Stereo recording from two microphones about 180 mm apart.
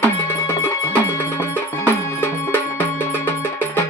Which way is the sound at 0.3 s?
15° left (ahead or behind).